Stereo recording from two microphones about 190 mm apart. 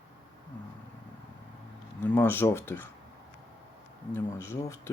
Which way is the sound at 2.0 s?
10° left (ahead or behind).